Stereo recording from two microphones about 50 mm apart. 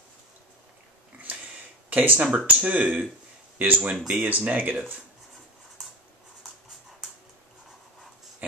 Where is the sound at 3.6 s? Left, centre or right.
Right.